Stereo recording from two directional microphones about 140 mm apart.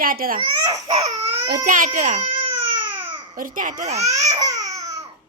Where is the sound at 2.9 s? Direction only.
35° right (ahead or behind).